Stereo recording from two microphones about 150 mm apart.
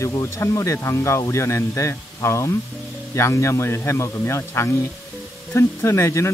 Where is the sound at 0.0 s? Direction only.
20° left (ahead or behind).